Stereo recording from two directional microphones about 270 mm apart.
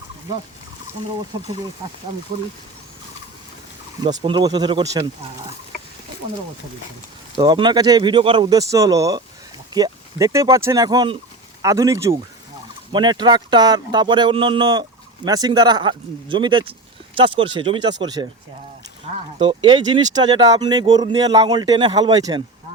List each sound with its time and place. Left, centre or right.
4.0 s speech: centre
7.3 s speech: centre
19.4 s speech: centre